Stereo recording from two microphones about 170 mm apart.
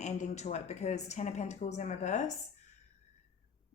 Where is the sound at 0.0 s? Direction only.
40° left (ahead or behind).